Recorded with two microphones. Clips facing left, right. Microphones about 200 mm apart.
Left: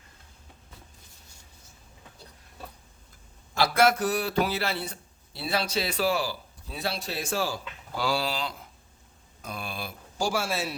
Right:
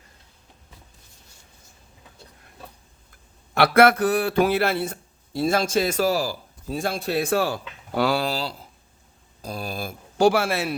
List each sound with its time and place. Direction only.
3.5 s speech: 60° right (ahead or behind); by 9.9 s 40° right (ahead or behind)
10.2 s a man's voice: 60° right (ahead or behind)